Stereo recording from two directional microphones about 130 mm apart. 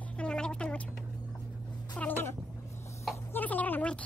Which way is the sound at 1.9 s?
15° left (ahead or behind).